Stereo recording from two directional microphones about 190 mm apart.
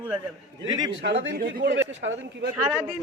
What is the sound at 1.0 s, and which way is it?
Speech, 65° right (ahead or behind).